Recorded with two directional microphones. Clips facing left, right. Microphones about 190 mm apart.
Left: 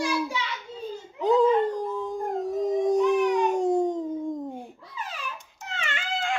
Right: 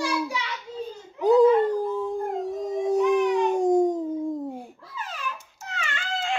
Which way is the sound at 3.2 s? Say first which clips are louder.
Right 1 dB; 10° left (ahead or behind).